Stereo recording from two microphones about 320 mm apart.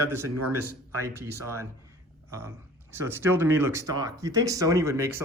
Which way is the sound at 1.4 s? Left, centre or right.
Centre.